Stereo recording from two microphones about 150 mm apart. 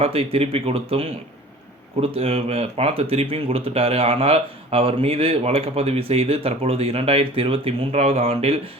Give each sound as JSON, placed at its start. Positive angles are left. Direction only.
{"t": 0.0, "sound": "speech", "side_deg": -40}